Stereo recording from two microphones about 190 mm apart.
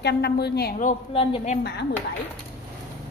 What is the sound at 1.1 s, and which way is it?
Speech, 35° left (ahead or behind).